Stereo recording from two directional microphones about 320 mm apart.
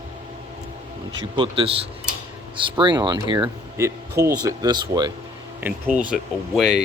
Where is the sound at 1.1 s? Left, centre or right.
Centre.